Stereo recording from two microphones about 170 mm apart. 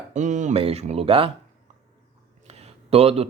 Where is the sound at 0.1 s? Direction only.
45° right (ahead or behind).